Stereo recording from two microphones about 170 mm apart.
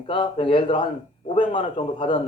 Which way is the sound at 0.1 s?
30° left (ahead or behind).